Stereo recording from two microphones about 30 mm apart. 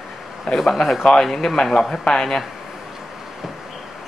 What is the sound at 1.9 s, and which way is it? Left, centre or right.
Speech, left.